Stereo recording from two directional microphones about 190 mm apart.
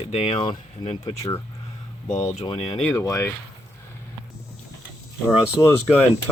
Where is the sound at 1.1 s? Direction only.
20° left (ahead or behind).